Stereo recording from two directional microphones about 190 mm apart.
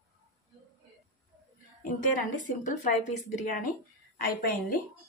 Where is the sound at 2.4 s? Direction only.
40° left (ahead or behind).